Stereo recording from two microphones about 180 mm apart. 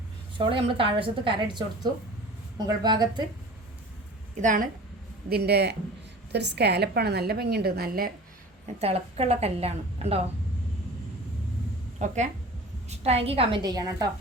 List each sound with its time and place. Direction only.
0.3 s speech: 30° right (ahead or behind)
4.4 s a woman's voice: 50° right (ahead or behind)
5.3 s a man's voice: 65° right (ahead or behind)
8.8 s a woman's voice: 35° right (ahead or behind)
11.9 s a woman's voice: 40° right (ahead or behind); by 14.1 s 20° right (ahead or behind)